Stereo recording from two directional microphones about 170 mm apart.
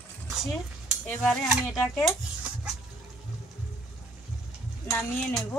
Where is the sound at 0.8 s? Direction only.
Centre (ahead or behind).